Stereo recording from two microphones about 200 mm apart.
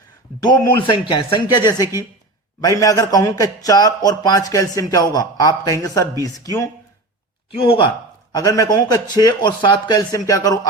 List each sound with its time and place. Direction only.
0.9 s a man's voice: 25° left (ahead or behind)